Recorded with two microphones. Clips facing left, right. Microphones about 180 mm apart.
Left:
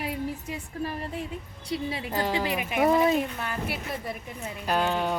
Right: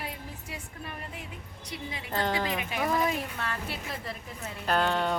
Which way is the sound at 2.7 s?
25° left (ahead or behind).